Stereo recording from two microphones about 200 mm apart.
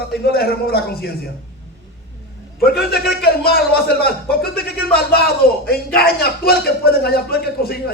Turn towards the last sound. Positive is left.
turn(degrees=50)  # may be behind; listen again after turning